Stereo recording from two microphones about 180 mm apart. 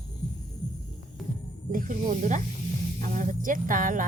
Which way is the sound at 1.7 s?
50° right (ahead or behind).